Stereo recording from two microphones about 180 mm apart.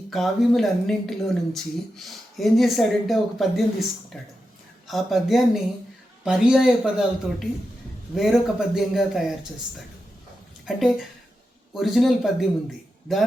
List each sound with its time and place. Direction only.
0.1 s speech: centre (ahead or behind)